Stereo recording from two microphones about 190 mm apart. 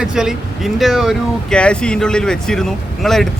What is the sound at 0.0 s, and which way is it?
Speech, 5° right (ahead or behind).